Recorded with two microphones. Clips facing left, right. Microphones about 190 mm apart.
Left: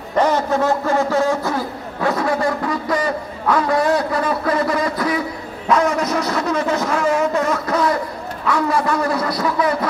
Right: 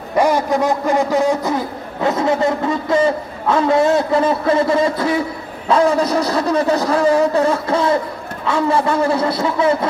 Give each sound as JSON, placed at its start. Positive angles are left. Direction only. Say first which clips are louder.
{"t": 0.1, "sound": "a man's voice", "louder": "right 2 dB", "side_deg": -10}